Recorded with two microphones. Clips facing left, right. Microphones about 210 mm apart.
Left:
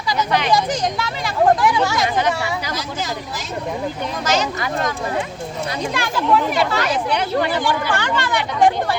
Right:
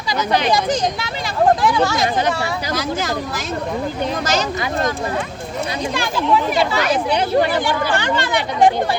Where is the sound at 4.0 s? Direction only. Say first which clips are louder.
Even; 35° right (ahead or behind).